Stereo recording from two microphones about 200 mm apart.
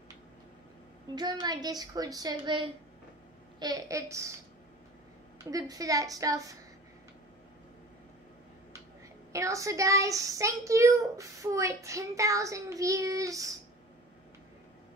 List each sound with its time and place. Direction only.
1.1 s a woman's voice: 20° right (ahead or behind)
5.4 s speech: 20° right (ahead or behind)
9.3 s speech: 15° right (ahead or behind)